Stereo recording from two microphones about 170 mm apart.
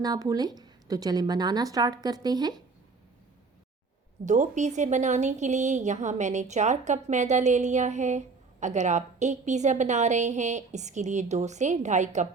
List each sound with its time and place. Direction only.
0.0 s a woman's voice: 20° right (ahead or behind)
4.3 s speech: 45° right (ahead or behind)